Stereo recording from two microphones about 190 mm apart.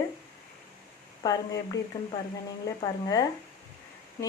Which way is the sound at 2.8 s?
20° left (ahead or behind).